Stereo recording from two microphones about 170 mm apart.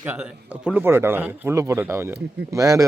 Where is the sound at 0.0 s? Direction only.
10° right (ahead or behind).